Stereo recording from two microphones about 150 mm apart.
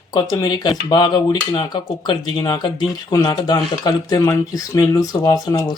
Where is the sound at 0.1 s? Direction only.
25° left (ahead or behind).